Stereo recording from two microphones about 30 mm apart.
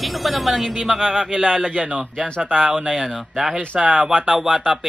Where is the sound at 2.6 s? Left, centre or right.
Right.